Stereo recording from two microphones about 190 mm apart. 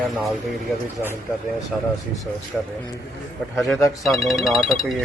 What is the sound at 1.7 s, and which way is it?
Speech, centre (ahead or behind).